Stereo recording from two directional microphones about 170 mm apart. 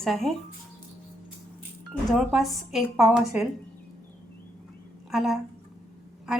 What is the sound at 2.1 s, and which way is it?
A woman's voice, centre (ahead or behind).